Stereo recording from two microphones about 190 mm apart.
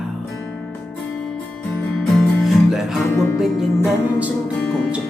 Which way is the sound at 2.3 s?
Centre (ahead or behind).